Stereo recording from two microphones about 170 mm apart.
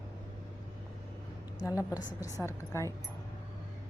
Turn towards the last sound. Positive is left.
turn(degrees=15)  # may be behind; listen again after turning